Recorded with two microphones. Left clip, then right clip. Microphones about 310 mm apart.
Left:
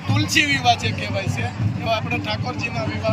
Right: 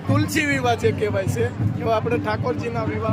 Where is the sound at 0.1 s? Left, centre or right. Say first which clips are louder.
Right 1 dB; centre.